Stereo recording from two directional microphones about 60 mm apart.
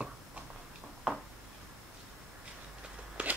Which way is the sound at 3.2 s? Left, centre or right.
Right.